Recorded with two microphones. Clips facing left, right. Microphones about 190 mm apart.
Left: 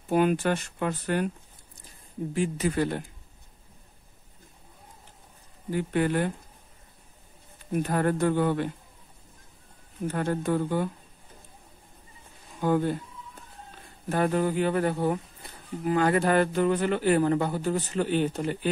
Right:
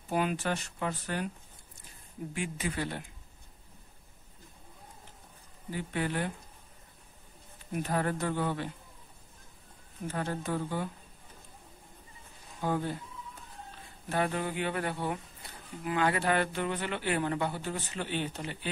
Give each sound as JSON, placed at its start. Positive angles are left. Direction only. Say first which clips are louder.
{"t": 0.1, "sound": "speech", "louder": "left 7 dB", "side_deg": 55}
{"t": 2.3, "sound": "speech", "louder": "left 9 dB", "side_deg": 35}
{"t": 5.7, "sound": "speech", "louder": "left 8 dB", "side_deg": 50}
{"t": 7.9, "sound": "speech", "louder": "left 6 dB", "side_deg": 50}
{"t": 10.0, "sound": "speech", "louder": "left 7 dB", "side_deg": 50}
{"t": 12.6, "sound": "speech", "louder": "left 7 dB", "side_deg": 55}
{"t": 14.0, "sound": "speech", "louder": "left 6 dB", "side_deg": 45}